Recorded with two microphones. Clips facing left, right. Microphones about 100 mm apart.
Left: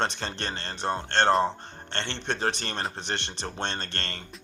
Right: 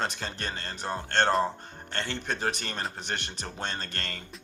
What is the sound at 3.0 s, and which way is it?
Speech, 25° left (ahead or behind).